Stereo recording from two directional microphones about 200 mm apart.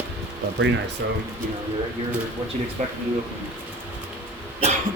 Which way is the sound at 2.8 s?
35° right (ahead or behind).